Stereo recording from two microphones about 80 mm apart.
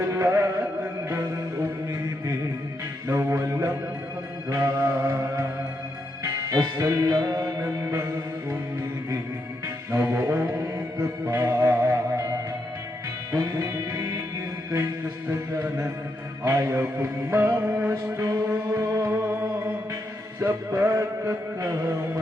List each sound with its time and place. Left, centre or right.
0.1 s music: right
3.1 s music: right
6.5 s music: right
9.9 s music: right
13.3 s music: right
15.3 s mantra: right
16.4 s music: right
16.8 s music: right
17.9 s music: right
18.9 s music: right
20.4 s music: right